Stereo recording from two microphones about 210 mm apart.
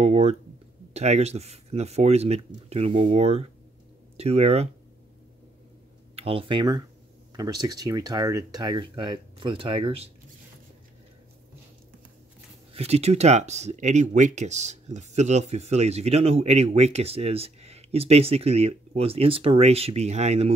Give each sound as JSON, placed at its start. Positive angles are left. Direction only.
{"t": 0.0, "sound": "speech", "side_deg": -30}
{"t": 6.1, "sound": "speech", "side_deg": -25}
{"t": 12.7, "sound": "speech", "side_deg": -30}